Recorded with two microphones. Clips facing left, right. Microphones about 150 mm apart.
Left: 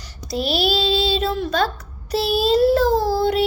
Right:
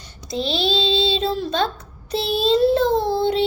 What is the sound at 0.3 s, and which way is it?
Child singing, 20° right (ahead or behind).